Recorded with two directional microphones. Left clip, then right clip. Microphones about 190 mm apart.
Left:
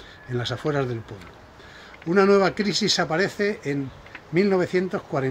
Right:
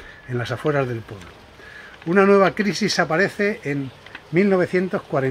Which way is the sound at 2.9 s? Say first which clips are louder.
Right 5 dB; 40° right (ahead or behind).